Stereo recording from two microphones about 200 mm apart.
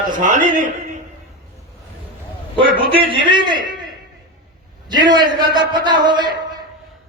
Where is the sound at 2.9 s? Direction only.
25° right (ahead or behind).